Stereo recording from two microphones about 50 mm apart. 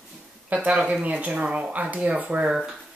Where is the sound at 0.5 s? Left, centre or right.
Right.